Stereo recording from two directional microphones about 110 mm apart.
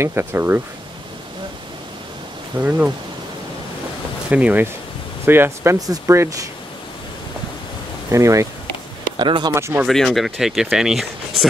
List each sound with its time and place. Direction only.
0.0 s speech: 20° right (ahead or behind)
2.5 s speech: 15° right (ahead or behind)
4.3 s speech: 10° right (ahead or behind)
8.1 s speech: 30° right (ahead or behind)
9.1 s speech: 45° right (ahead or behind)
9.5 s speech: 25° right (ahead or behind)
9.8 s speech: centre (ahead or behind)